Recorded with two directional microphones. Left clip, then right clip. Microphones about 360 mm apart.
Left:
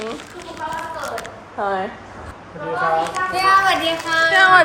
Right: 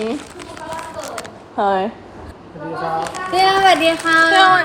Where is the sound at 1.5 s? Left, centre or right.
Right.